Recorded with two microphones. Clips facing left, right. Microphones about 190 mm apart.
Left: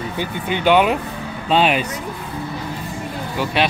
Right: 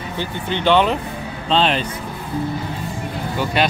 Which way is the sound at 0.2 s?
10° left (ahead or behind).